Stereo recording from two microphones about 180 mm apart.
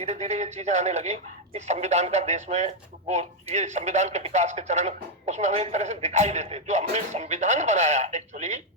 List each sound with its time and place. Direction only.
0.0 s speech: 40° right (ahead or behind)